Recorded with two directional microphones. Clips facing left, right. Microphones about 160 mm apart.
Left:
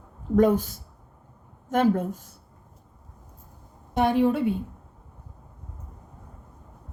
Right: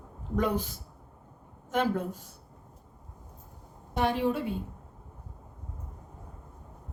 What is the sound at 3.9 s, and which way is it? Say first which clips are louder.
Speech: left 6 dB; 55° left (ahead or behind).